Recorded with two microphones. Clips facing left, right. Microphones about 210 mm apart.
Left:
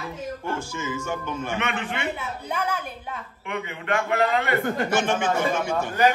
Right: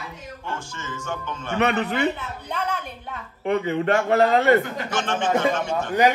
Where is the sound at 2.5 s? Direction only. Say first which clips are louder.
Even; 5° left (ahead or behind).